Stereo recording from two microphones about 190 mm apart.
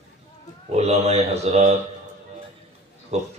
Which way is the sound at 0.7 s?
35° right (ahead or behind).